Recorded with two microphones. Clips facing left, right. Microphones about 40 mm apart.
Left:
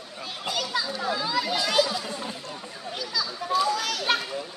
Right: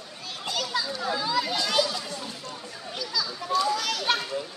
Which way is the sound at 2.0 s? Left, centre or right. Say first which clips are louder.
Left 2 dB; left.